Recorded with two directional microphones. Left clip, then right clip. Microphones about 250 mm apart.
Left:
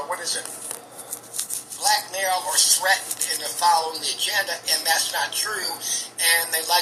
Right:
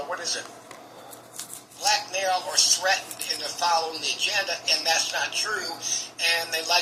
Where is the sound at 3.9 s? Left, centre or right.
Left.